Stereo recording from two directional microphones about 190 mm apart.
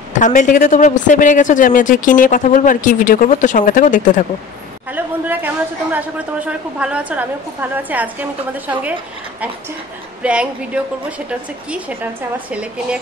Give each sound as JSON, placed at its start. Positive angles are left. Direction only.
{"t": 0.2, "sound": "a woman's voice", "side_deg": 40}
{"t": 4.9, "sound": "a woman's voice", "side_deg": -10}
{"t": 10.2, "sound": "a woman's voice", "side_deg": -5}